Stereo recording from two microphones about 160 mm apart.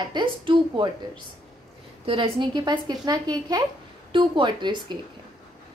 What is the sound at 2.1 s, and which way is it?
A woman's voice, 35° right (ahead or behind).